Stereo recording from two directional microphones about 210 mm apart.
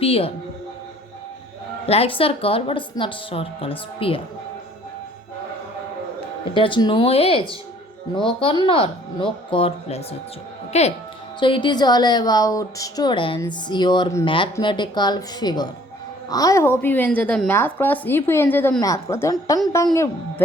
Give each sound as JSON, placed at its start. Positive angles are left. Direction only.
{"t": 0.0, "sound": "a woman's voice", "side_deg": 25}
{"t": 1.9, "sound": "a woman's voice", "side_deg": 25}
{"t": 6.5, "sound": "a woman's voice", "side_deg": 25}